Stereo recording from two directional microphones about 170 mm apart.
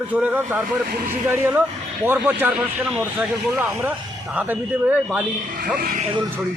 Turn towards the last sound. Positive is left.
turn(degrees=-55)  # may be behind; listen again after turning